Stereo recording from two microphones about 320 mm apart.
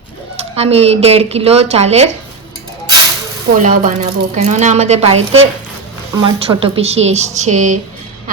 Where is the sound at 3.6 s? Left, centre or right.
Right.